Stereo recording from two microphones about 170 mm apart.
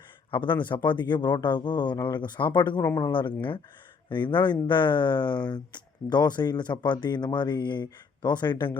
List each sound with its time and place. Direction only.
0.3 s speech: 30° left (ahead or behind)